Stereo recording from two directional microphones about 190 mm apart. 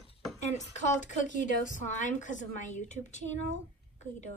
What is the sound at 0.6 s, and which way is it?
A woman's voice, 40° left (ahead or behind).